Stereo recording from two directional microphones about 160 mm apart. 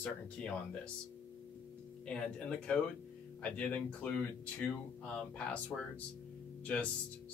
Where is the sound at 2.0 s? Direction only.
5° left (ahead or behind).